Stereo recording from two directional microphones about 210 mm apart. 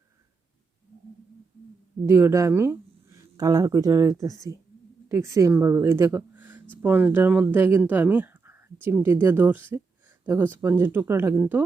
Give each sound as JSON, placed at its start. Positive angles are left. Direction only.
{"t": 2.0, "sound": "speech", "side_deg": -15}